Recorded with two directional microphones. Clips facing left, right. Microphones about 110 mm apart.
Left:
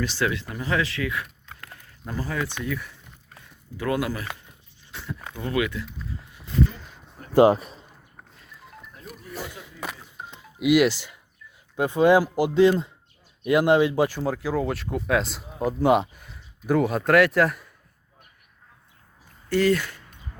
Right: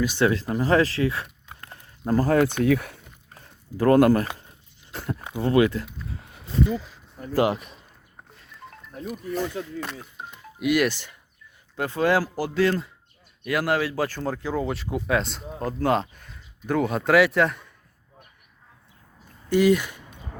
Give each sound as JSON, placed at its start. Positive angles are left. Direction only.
{"t": 0.3, "sound": "speech", "side_deg": -35}
{"t": 1.5, "sound": "dog", "side_deg": -25}
{"t": 2.0, "sound": "speech", "side_deg": -45}
{"t": 3.3, "sound": "a sound", "side_deg": -40}
{"t": 5.4, "sound": "speech", "side_deg": -30}
{"t": 6.1, "sound": "a sound", "side_deg": -65}
{"t": 6.7, "sound": "speech", "side_deg": -5}
{"t": 7.3, "sound": "speech", "side_deg": 35}
{"t": 8.4, "sound": "goat", "side_deg": 0}
{"t": 9.0, "sound": "speech", "side_deg": 5}
{"t": 10.7, "sound": "speech", "side_deg": 15}
{"t": 19.5, "sound": "speech", "side_deg": -15}